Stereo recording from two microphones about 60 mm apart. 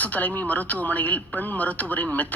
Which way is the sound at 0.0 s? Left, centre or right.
Left.